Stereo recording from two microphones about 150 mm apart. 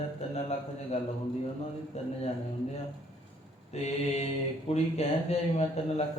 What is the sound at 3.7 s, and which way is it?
Speech, 45° left (ahead or behind).